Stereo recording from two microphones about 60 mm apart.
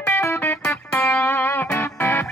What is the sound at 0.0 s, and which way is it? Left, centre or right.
Music, left.